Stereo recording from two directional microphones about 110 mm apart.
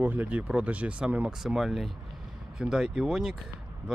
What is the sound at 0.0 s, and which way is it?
Speech, 15° right (ahead or behind).